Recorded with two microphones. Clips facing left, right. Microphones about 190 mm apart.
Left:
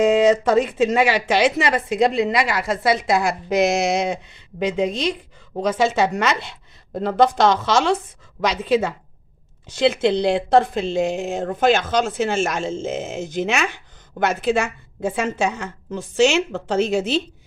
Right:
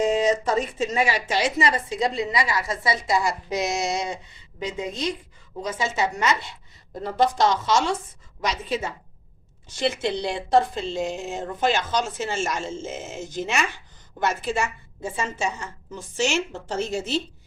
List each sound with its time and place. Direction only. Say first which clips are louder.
0.0 s speech: left 6 dB; 65° left (ahead or behind)
4.6 s a woman's voice: left 7 dB; 70° left (ahead or behind)
7.0 s a woman's voice: left 5 dB; 60° left (ahead or behind)
10.9 s speech: left 7 dB; 85° left
11.3 s speech: left 6 dB; 55° left (ahead or behind)
12.0 s speech: left 6 dB; 75° left (ahead or behind)
14.2 s speech: left 5 dB; 60° left (ahead or behind)